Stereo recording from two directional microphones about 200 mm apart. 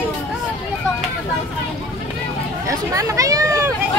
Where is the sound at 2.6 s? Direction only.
15° right (ahead or behind).